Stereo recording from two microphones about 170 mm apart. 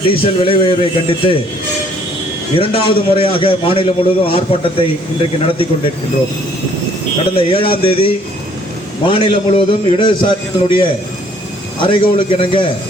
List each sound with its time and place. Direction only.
0.0 s a man's voice: 30° left (ahead or behind)
2.6 s a man's voice: 30° left (ahead or behind)
7.3 s a man's voice: 30° left (ahead or behind)